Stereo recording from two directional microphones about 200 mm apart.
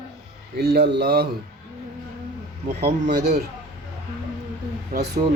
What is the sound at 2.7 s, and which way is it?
Speech, 45° right (ahead or behind).